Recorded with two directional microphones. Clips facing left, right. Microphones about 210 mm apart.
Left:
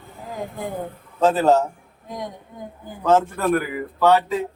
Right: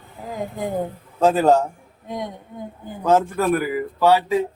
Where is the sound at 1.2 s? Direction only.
10° right (ahead or behind).